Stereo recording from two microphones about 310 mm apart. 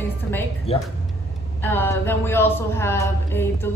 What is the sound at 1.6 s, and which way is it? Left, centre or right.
Speech, centre.